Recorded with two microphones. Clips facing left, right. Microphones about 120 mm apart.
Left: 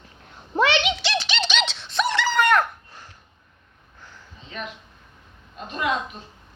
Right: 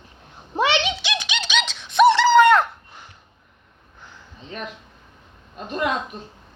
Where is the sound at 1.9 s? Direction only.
25° right (ahead or behind).